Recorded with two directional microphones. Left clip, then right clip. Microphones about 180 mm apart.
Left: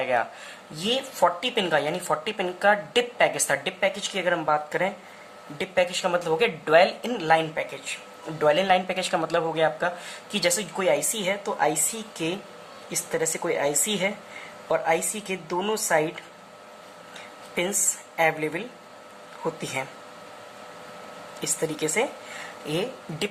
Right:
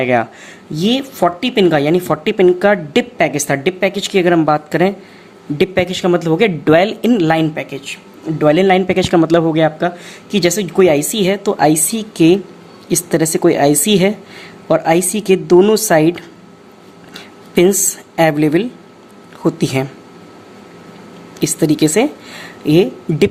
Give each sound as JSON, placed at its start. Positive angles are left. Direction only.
{"t": 0.0, "sound": "a woman's voice", "side_deg": -40}
{"t": 5.5, "sound": "a woman's voice", "side_deg": -45}
{"t": 17.5, "sound": "a woman's voice", "side_deg": -55}
{"t": 19.8, "sound": "a woman's voice", "side_deg": -60}
{"t": 21.4, "sound": "a woman's voice", "side_deg": -50}